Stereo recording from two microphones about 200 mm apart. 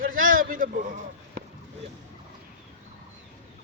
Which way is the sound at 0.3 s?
45° right (ahead or behind).